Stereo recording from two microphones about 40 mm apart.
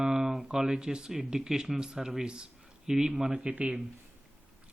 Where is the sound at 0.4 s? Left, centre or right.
Centre.